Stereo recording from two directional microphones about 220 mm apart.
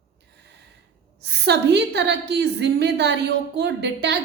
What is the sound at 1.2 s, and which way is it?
A woman's voice, 50° right (ahead or behind).